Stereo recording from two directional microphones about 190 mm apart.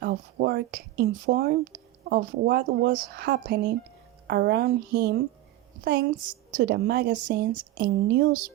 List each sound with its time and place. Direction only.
0.0 s speech: 60° right (ahead or behind)